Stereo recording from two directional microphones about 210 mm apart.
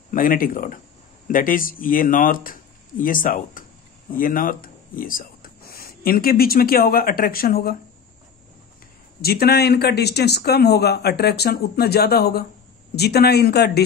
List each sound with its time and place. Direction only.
0.1 s speech: 40° left (ahead or behind)
9.2 s speech: 45° left (ahead or behind)